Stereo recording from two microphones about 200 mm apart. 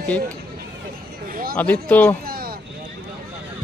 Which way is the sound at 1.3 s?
45° right (ahead or behind).